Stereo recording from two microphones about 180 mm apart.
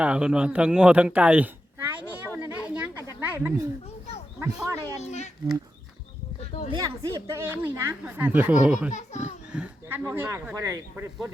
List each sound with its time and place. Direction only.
0.0 s a sound: 5° right (ahead or behind)
4.4 s speech: 15° right (ahead or behind)
4.9 s a child's voice: 40° left (ahead or behind)
6.4 s a sound: 40° left (ahead or behind)
6.7 s speech: 20° right (ahead or behind)
8.9 s a child's voice: 40° left (ahead or behind)
9.5 s speech: 10° right (ahead or behind)